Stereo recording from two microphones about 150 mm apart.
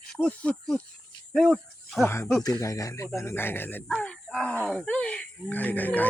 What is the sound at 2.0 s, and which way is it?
Speech, 15° left (ahead or behind).